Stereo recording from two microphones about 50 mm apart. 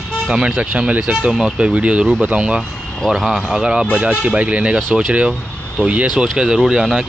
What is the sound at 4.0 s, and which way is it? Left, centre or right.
Speech, right.